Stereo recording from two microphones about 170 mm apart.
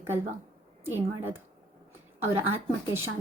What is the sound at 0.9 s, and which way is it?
Speech, 10° right (ahead or behind).